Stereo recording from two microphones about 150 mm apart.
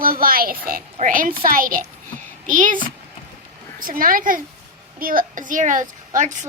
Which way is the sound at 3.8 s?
70° right (ahead or behind).